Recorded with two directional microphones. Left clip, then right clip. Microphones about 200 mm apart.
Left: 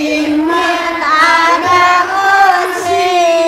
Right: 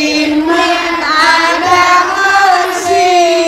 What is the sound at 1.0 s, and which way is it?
Music, 10° left (ahead or behind).